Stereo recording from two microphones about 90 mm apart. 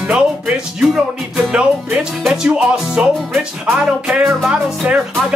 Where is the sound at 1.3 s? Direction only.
10° right (ahead or behind).